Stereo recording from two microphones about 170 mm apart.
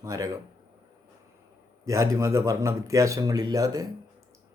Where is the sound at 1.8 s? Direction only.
20° right (ahead or behind).